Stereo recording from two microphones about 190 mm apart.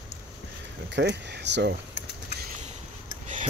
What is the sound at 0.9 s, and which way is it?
Speech, 65° right (ahead or behind).